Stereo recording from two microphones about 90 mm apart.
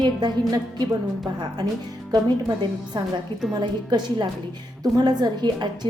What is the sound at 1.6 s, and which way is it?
Speech, 50° right (ahead or behind).